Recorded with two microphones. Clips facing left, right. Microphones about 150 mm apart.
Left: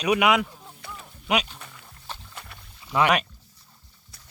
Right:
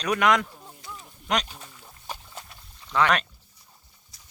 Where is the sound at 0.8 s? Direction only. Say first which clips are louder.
Left 2 dB; 65° left (ahead or behind).